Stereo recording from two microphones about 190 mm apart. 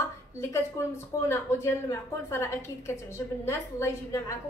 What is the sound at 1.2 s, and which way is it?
A woman's voice, 15° left (ahead or behind).